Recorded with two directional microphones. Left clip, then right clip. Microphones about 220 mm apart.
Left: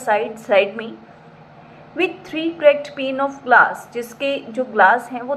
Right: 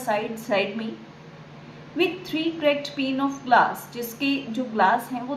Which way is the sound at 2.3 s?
15° left (ahead or behind).